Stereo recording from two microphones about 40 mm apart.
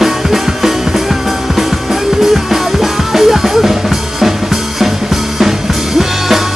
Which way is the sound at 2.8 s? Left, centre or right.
Centre.